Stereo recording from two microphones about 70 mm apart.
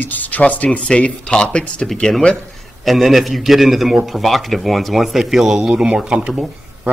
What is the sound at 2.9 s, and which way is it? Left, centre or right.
Speech, centre.